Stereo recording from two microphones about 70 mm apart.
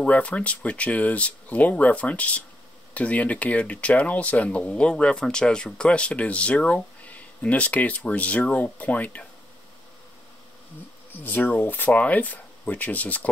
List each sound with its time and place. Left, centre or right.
0.0 s speech: centre
11.1 s speech: left